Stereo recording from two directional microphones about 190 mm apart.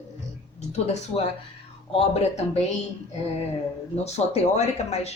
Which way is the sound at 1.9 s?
30° left (ahead or behind).